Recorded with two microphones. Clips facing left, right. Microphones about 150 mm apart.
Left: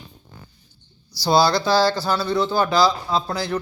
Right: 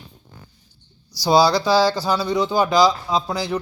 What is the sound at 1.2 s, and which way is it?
Speech, 10° right (ahead or behind).